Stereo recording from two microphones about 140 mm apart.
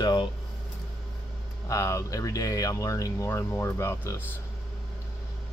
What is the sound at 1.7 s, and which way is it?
Speech, 20° left (ahead or behind).